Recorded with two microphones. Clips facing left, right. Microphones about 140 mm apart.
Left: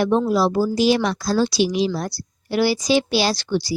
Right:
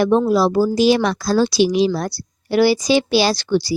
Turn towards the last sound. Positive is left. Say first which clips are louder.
# right 4 dB
turn(degrees=-80)